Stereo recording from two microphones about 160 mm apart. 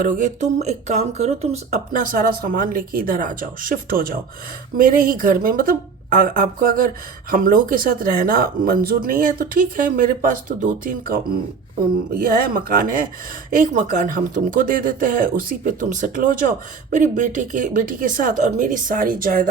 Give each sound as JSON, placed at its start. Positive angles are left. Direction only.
{"t": 0.0, "sound": "speech", "side_deg": -50}
{"t": 1.9, "sound": "speech", "side_deg": -60}